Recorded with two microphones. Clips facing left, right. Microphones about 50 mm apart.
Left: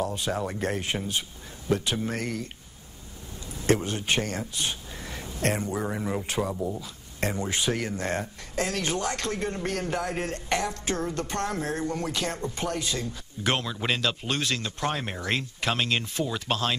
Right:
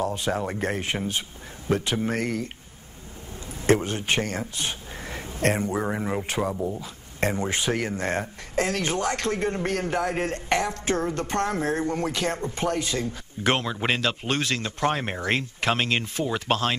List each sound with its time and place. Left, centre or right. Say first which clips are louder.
0.0 s speech: right 2 dB; right